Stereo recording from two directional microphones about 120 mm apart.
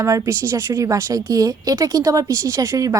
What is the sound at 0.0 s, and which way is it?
Speech, 25° right (ahead or behind).